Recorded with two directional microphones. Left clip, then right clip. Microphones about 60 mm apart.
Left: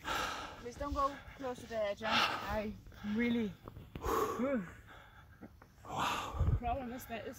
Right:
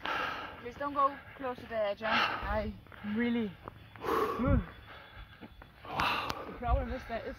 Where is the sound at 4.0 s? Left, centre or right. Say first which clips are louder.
Right 3 dB; centre.